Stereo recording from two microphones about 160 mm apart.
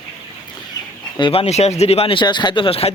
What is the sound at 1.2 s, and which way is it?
Speech, 35° left (ahead or behind).